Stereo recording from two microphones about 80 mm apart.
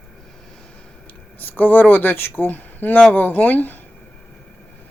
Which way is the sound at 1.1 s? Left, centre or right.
Left.